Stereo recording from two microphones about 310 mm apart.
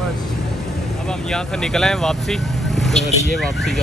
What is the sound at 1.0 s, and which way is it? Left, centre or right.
Vehicle, centre.